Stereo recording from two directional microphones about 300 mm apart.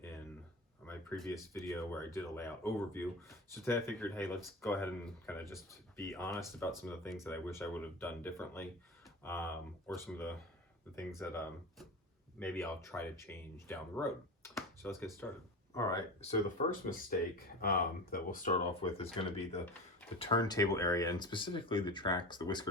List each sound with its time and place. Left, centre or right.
0.9 s a sound: centre
1.6 s speech: centre
11.2 s speech: centre
12.4 s speech: centre
16.6 s speech: left